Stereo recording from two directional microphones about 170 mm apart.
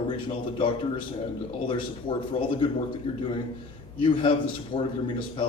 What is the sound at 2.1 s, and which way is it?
Speech, 30° left (ahead or behind).